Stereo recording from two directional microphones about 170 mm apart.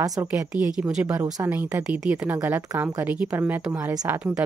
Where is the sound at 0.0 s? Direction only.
20° right (ahead or behind).